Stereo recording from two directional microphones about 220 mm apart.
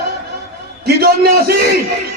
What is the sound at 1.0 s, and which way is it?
Speech, 45° right (ahead or behind).